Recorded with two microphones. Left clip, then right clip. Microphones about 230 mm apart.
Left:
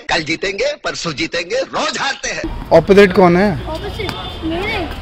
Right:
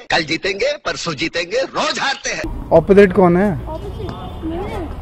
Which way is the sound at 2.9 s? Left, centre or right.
Centre.